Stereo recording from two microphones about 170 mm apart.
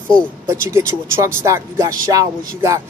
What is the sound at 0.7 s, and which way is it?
Speech, 15° right (ahead or behind).